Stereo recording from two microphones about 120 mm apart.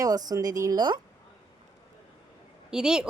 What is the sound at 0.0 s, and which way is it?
Speech, 30° right (ahead or behind).